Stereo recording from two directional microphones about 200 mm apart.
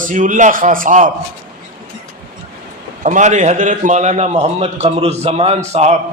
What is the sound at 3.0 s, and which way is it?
A man's voice, 35° right (ahead or behind).